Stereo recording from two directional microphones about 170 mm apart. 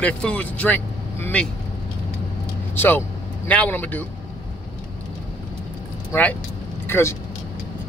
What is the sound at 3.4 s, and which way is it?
Speech, 10° left (ahead or behind).